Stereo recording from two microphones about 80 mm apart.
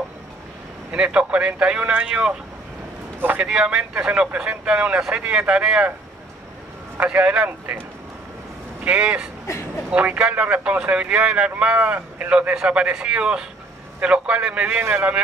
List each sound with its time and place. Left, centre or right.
0.9 s speech: centre
3.2 s a man's voice: right
3.4 s speech: centre
7.0 s speech: centre
8.8 s speech: centre